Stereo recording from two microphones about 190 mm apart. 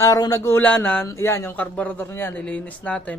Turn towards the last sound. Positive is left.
turn(degrees=5)  # may be behind; listen again after turning